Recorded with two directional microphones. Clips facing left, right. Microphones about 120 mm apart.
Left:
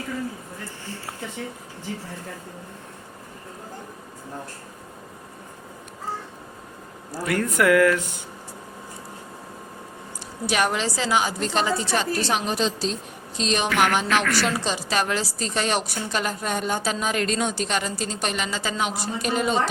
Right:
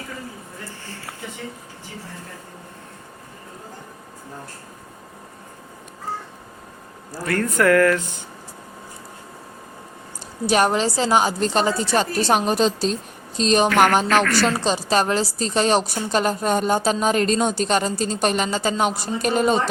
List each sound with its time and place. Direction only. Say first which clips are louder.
7.3 s speech: right 2 dB; 10° left (ahead or behind)
10.5 s a woman's voice: right 5 dB; 35° right (ahead or behind)
13.7 s a woman's voice: right 5 dB; centre (ahead or behind)
14.4 s a woman's voice: right 4 dB; 35° right (ahead or behind)